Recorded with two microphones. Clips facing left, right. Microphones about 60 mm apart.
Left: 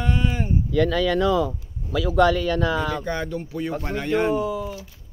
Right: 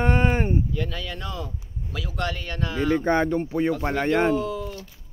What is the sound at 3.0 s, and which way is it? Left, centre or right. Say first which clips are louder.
Speech: right 6 dB; right.